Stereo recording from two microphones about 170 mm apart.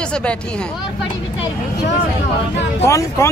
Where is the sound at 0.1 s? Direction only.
5° left (ahead or behind).